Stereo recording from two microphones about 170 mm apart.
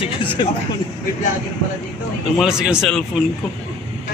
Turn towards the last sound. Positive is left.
turn(degrees=-5)  # may be behind; listen again after turning